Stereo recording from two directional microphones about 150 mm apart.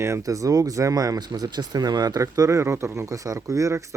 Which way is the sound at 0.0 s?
20° right (ahead or behind).